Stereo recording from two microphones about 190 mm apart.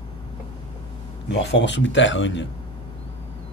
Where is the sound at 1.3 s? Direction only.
65° left (ahead or behind).